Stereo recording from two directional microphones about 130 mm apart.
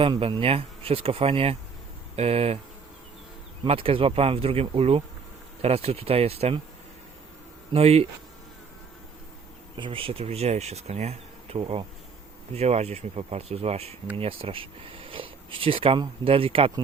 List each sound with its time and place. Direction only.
0.0 s speech: 40° right (ahead or behind)
3.6 s speech: 45° right (ahead or behind)
7.7 s speech: 50° right (ahead or behind)
9.7 s speech: 40° right (ahead or behind)